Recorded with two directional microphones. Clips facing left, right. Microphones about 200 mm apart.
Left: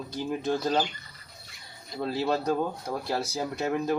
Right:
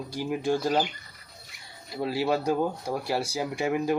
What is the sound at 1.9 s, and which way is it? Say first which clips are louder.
Speech: right 1 dB; 10° right (ahead or behind).